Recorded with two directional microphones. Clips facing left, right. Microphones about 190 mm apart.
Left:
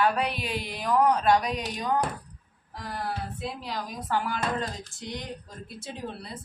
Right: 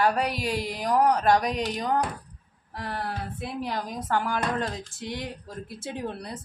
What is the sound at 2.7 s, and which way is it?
A woman's voice, 60° right (ahead or behind).